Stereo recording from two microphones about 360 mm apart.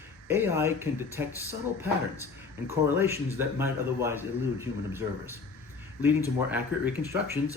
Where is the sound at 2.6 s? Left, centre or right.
Centre.